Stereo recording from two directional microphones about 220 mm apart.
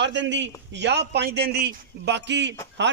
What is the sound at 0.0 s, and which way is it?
A man's voice, 55° right (ahead or behind).